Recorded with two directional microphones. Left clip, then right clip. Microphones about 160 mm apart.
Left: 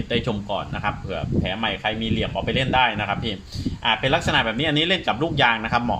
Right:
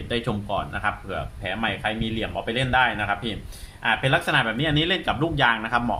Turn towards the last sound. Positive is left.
turn(degrees=40)  # may be behind; listen again after turning